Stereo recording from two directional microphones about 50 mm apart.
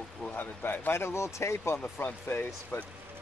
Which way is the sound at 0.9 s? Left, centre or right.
Left.